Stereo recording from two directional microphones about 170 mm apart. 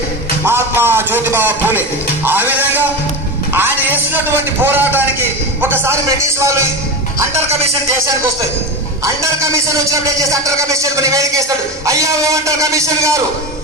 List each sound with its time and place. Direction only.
0.5 s a man's voice: 15° right (ahead or behind)
7.3 s music: 40° right (ahead or behind)
8.0 s speech: 20° right (ahead or behind)